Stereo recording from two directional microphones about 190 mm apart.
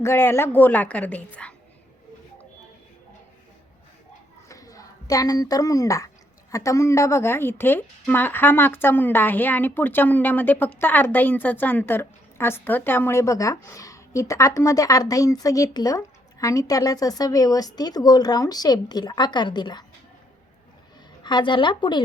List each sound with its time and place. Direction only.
0.0 s a woman's voice: 15° left (ahead or behind)
4.4 s a sound: 15° left (ahead or behind)
6.5 s a woman's voice: 15° left (ahead or behind)
21.2 s speech: 25° left (ahead or behind)